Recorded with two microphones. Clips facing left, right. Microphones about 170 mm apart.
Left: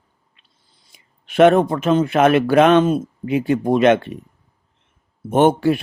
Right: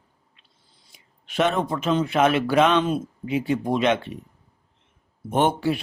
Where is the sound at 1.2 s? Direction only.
60° left (ahead or behind).